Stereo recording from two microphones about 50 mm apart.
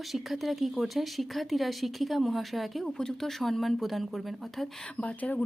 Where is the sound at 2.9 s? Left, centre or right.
Centre.